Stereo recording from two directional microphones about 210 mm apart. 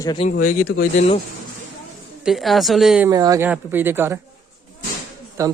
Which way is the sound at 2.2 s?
Centre (ahead or behind).